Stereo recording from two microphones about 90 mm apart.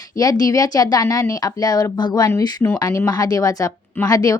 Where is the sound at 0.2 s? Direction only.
40° left (ahead or behind).